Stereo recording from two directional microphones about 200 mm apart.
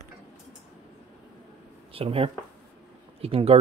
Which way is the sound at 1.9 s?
30° right (ahead or behind).